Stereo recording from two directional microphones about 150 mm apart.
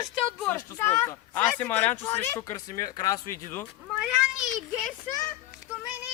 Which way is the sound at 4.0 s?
Centre (ahead or behind).